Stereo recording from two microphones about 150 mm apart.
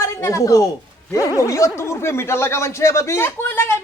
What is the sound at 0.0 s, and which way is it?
A woman's voice, 20° left (ahead or behind).